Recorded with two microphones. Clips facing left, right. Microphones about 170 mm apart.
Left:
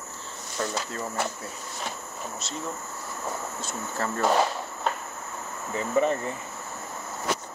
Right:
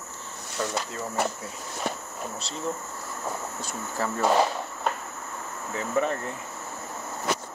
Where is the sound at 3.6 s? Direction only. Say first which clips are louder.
Right 1 dB; 10° right (ahead or behind).